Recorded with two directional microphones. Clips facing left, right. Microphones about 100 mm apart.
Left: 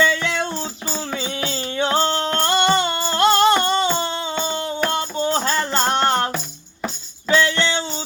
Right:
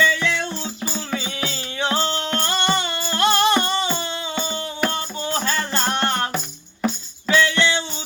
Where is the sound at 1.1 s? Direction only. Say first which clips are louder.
Left 2 dB; 40° left (ahead or behind).